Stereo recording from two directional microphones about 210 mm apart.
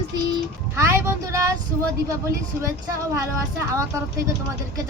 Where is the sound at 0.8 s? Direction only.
15° right (ahead or behind).